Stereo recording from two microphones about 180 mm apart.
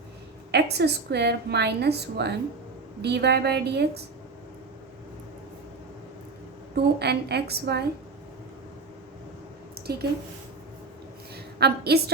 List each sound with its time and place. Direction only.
0.5 s a woman's voice: 70° right (ahead or behind)
6.7 s a woman's voice: 65° right (ahead or behind)
9.7 s a sound: 60° right (ahead or behind)
11.6 s a woman's voice: 65° right (ahead or behind)